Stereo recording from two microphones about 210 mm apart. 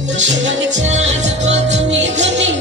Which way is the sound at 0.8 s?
35° right (ahead or behind).